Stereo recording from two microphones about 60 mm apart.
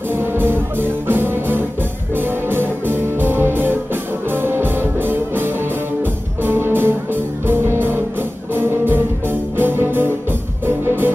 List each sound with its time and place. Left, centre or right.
0.1 s music: right